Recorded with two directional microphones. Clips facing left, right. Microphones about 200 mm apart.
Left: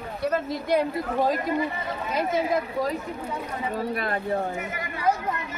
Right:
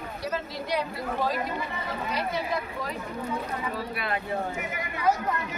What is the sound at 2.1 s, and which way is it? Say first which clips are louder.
Speech: left 7 dB; 50° left (ahead or behind).